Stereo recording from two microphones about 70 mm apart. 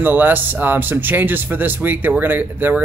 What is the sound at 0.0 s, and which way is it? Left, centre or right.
Speech, right.